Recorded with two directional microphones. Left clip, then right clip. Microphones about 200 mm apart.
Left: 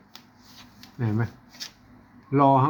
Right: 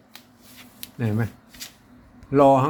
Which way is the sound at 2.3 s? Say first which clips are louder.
Right 3 dB; 30° right (ahead or behind).